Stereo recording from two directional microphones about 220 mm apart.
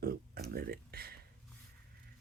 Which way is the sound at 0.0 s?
45° right (ahead or behind).